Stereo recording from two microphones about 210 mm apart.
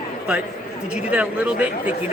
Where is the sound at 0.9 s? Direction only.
5° right (ahead or behind).